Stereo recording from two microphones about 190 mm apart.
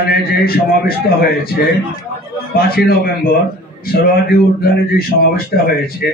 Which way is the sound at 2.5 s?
55° left (ahead or behind).